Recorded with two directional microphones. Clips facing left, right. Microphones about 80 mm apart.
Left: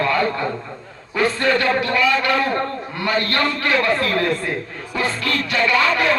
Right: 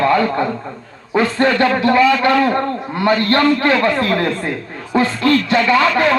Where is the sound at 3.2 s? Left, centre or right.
Right.